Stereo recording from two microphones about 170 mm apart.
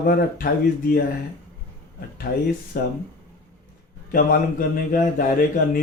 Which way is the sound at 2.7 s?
60° left (ahead or behind).